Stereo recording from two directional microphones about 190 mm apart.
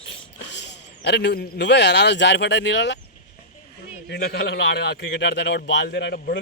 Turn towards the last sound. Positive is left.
turn(degrees=55)  # may be behind; listen again after turning